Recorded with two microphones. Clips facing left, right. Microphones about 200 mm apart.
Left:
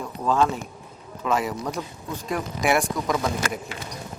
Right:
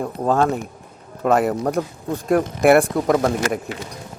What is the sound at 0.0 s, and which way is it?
Speech, 55° right (ahead or behind).